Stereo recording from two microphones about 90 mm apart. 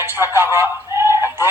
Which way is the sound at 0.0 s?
25° right (ahead or behind).